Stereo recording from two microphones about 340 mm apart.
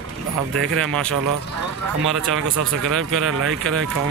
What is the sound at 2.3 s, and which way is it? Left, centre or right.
Speech, right.